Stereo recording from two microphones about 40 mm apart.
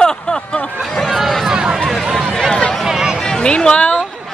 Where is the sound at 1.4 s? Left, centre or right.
Centre.